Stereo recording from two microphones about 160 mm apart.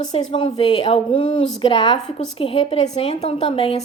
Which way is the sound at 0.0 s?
40° left (ahead or behind).